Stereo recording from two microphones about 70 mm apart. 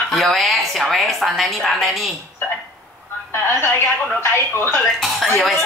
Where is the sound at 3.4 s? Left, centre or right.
Left.